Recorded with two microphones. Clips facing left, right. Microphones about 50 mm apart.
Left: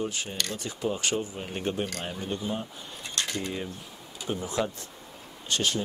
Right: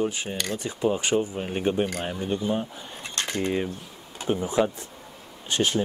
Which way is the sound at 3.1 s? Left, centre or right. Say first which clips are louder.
Right 6 dB; right.